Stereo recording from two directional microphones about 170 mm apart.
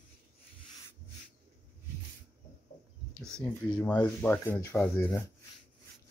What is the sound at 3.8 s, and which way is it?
Speech, 10° left (ahead or behind).